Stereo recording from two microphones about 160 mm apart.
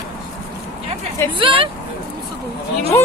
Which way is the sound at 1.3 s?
35° right (ahead or behind).